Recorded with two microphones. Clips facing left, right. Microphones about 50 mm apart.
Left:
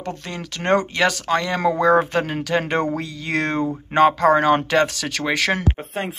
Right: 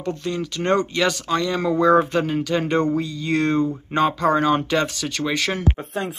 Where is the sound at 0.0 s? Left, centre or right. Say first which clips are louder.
Right 4 dB; left.